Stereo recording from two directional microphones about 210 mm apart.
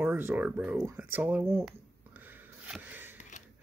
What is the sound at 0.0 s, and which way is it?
Speech, 10° right (ahead or behind).